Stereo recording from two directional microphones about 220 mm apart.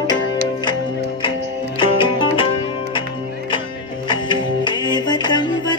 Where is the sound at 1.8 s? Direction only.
25° left (ahead or behind).